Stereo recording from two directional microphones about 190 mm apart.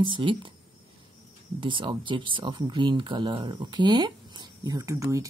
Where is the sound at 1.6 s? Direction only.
25° right (ahead or behind).